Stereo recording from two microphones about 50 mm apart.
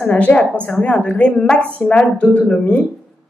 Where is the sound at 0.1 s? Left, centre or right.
Left.